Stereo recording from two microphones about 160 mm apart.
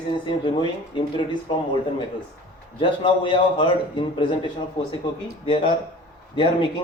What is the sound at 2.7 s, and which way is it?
A man's voice, 30° left (ahead or behind).